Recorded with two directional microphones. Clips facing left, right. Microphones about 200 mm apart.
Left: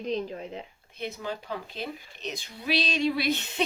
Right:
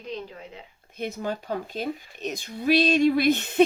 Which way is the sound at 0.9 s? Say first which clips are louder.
Right 4 dB; 50° right (ahead or behind).